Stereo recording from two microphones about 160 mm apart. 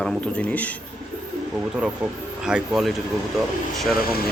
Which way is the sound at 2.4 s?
5° right (ahead or behind).